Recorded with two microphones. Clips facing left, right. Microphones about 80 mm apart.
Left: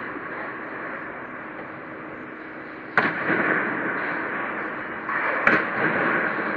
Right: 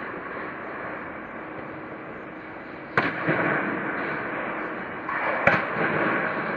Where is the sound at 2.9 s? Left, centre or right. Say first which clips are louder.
Left 2 dB; left.